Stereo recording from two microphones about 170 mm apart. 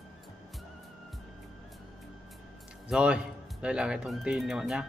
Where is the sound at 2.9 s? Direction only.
5° right (ahead or behind).